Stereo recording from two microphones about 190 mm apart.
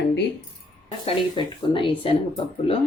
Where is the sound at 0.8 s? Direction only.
30° left (ahead or behind).